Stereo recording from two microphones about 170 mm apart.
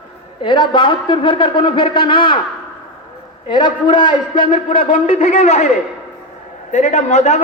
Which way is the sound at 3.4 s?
25° left (ahead or behind).